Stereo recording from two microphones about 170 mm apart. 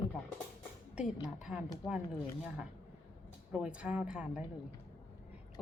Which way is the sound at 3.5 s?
5° right (ahead or behind).